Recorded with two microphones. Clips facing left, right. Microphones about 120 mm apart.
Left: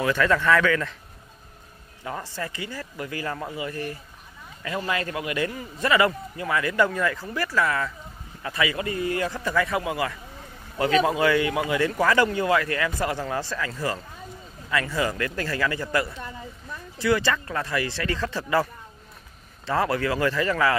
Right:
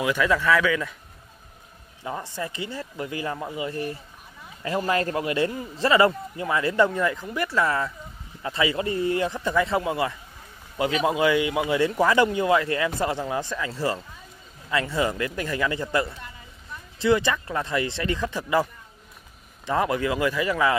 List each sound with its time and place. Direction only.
0.0 s speech: 10° right (ahead or behind)
2.0 s a man's voice: 20° right (ahead or behind)
10.8 s a man's voice: 15° right (ahead or behind)